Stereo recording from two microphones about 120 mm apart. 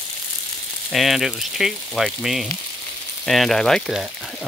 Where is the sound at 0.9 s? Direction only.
Centre (ahead or behind).